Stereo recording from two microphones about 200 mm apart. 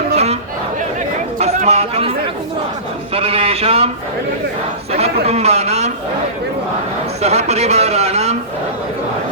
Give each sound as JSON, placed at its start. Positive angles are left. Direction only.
{"t": 1.4, "sound": "chatter", "side_deg": -35}
{"t": 3.2, "sound": "a man's voice", "side_deg": -30}
{"t": 4.9, "sound": "a man's voice", "side_deg": -30}
{"t": 7.2, "sound": "a man's voice", "side_deg": -35}